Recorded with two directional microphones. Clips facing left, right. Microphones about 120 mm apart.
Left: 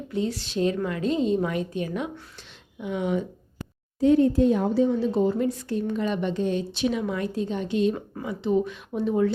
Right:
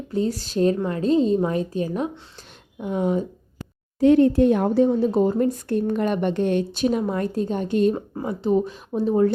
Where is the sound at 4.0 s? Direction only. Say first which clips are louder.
Right 3 dB; 70° right (ahead or behind).